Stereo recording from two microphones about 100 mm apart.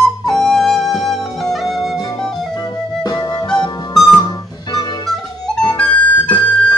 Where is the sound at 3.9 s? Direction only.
Centre (ahead or behind).